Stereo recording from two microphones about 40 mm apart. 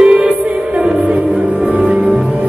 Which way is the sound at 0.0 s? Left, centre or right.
Right.